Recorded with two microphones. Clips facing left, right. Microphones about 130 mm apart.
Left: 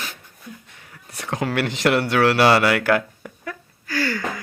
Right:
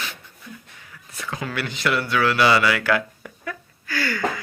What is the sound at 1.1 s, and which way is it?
Speech, 70° left (ahead or behind).